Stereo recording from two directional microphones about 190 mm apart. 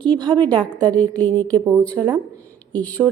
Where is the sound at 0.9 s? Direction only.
10° left (ahead or behind).